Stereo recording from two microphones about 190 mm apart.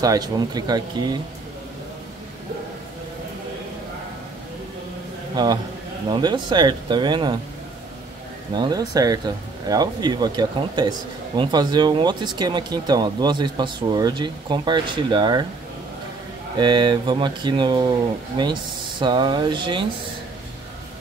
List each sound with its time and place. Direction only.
0.0 s speech: 20° right (ahead or behind)
5.3 s a man's voice: 20° right (ahead or behind)
8.5 s speech: 20° right (ahead or behind)
16.5 s speech: 25° right (ahead or behind)